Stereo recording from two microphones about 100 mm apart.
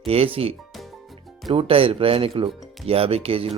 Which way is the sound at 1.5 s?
70° right (ahead or behind).